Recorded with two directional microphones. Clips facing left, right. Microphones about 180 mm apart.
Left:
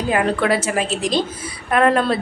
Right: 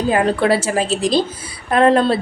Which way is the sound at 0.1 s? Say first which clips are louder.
Right 2 dB; 30° right (ahead or behind).